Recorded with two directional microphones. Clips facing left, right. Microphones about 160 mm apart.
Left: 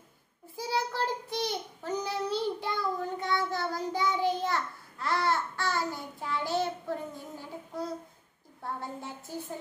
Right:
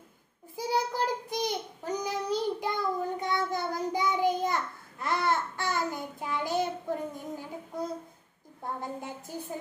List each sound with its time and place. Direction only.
0.6 s child singing: 15° right (ahead or behind)
4.4 s babbling: 20° right (ahead or behind)
8.6 s a sound: 15° right (ahead or behind)